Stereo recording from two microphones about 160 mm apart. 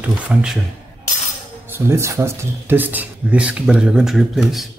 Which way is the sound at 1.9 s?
15° right (ahead or behind).